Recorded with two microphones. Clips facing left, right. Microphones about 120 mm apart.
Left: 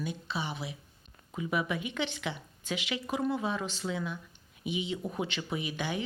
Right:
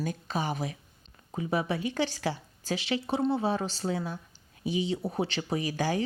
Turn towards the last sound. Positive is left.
turn(degrees=-35)  # may be behind; listen again after turning